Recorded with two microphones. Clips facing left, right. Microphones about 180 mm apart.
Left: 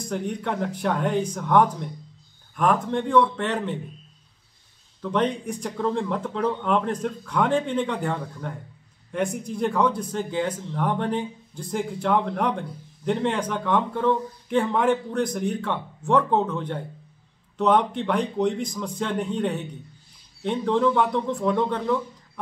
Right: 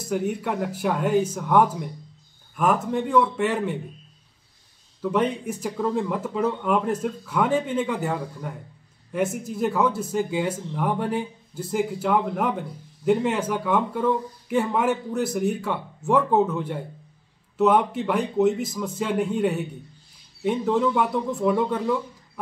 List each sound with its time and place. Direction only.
0.0 s speech: 5° right (ahead or behind)
5.0 s speech: 5° right (ahead or behind)